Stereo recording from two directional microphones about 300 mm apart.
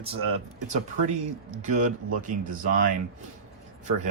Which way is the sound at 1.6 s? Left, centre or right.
Right.